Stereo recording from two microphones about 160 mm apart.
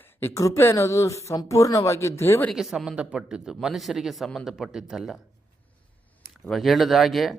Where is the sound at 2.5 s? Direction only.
Centre (ahead or behind).